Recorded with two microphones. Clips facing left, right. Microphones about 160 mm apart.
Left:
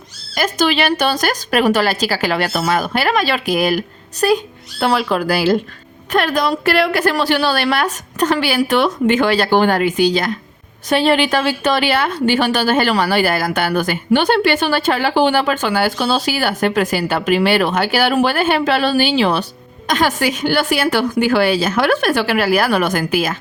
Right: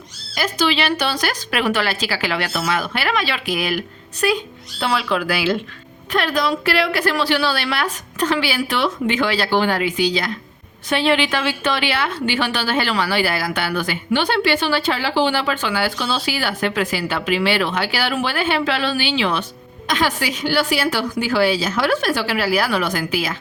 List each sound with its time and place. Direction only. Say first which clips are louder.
0.3 s a woman's voice: left 3 dB; 50° left (ahead or behind)